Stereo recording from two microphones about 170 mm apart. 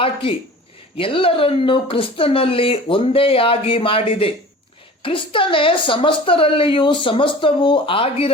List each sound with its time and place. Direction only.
0.0 s speech: 35° left (ahead or behind)